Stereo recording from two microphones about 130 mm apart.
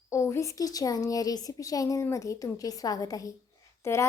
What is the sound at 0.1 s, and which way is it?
A woman's voice, 20° left (ahead or behind).